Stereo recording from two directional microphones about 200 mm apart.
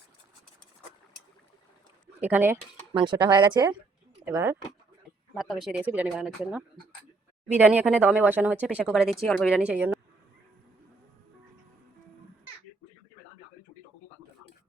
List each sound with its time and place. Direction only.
2.2 s speech: 10° right (ahead or behind)
2.9 s speech: 25° right (ahead or behind)
4.3 s speech: 10° right (ahead or behind)